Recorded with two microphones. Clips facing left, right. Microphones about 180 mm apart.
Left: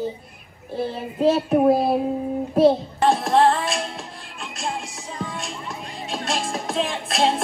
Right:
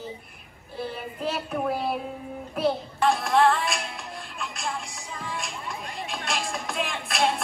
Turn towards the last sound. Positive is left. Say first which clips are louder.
# left 5 dB
turn(degrees=30)  # may be behind; listen again after turning